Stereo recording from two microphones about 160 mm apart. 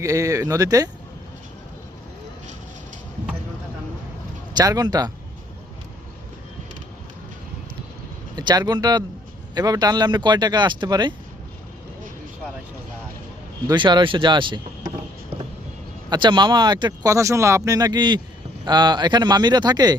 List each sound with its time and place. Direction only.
0.0 s speech: 20° right (ahead or behind)
4.5 s speech: 25° right (ahead or behind)
8.4 s speech: 25° right (ahead or behind)
13.7 s speech: 30° right (ahead or behind)
16.0 s speech: 30° right (ahead or behind)